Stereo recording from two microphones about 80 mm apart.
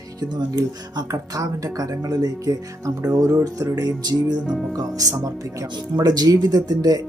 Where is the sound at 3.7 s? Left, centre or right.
Right.